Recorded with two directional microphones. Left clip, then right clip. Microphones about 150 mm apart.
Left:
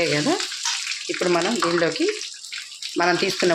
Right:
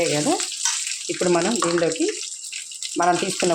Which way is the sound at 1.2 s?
20° right (ahead or behind).